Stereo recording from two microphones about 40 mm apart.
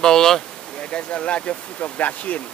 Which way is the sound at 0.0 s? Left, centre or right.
Centre.